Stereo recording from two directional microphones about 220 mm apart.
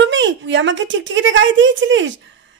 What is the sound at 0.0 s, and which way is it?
A woman's voice, 55° right (ahead or behind).